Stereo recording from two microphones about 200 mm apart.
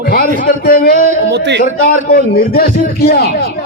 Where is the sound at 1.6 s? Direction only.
45° left (ahead or behind).